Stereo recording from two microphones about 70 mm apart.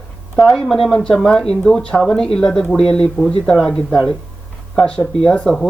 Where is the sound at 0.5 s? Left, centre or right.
Centre.